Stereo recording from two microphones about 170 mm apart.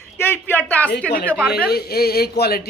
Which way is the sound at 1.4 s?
70° left (ahead or behind).